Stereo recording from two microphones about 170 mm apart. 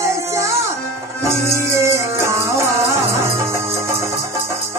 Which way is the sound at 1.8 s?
15° right (ahead or behind).